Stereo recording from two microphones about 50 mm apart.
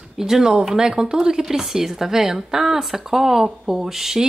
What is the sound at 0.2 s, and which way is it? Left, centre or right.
A woman's voice, centre.